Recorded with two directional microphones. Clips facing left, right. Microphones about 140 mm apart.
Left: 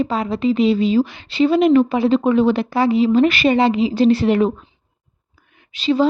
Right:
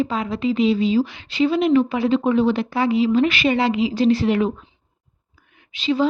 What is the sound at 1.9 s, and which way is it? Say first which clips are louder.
Speech: left 3 dB; 35° left (ahead or behind).